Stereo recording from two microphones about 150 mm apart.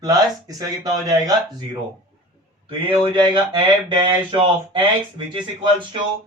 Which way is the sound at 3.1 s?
30° right (ahead or behind).